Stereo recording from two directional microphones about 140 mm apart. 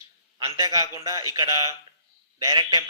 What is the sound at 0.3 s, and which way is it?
A man's voice, 25° right (ahead or behind).